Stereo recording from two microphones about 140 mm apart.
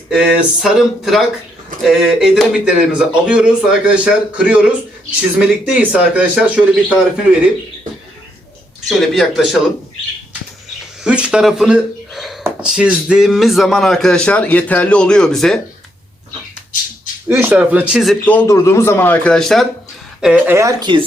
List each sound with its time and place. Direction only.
0.1 s a man's voice: 5° right (ahead or behind)
8.9 s a man's voice: centre (ahead or behind)
11.0 s a man's voice: 5° right (ahead or behind)
17.2 s speech: 15° right (ahead or behind)
18.3 s a man's voice: 15° left (ahead or behind)
20.2 s speech: 10° right (ahead or behind)
20.6 s speech: 25° right (ahead or behind)